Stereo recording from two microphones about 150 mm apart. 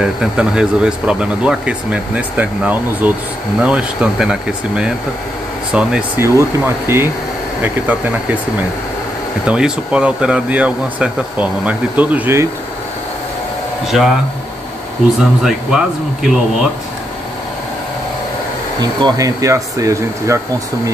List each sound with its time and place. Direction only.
0.0 s speech: 5° right (ahead or behind)
6.2 s speech: 15° right (ahead or behind)
9.5 s speech: 5° right (ahead or behind)
13.8 s speech: centre (ahead or behind)
15.1 s speech: 5° right (ahead or behind)
18.8 s speech: 30° right (ahead or behind)